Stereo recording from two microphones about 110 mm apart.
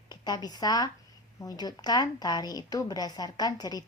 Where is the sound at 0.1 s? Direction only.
40° left (ahead or behind).